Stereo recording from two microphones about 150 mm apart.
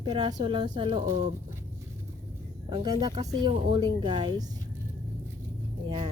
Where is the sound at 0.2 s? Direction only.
30° right (ahead or behind).